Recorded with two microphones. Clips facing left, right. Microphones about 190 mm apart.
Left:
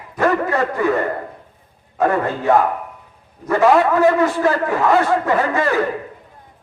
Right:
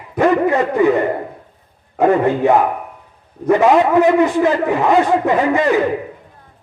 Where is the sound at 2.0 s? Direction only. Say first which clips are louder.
Right 5 dB; 15° right (ahead or behind).